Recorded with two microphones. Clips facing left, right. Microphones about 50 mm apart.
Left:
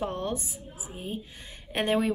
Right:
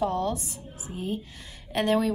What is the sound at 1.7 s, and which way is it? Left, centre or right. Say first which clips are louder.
Speech: right 2 dB; left.